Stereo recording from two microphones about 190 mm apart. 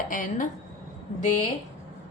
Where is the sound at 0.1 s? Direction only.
45° left (ahead or behind).